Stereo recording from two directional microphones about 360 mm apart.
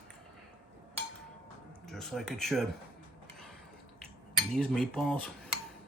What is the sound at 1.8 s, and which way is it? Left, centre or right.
Speech, centre.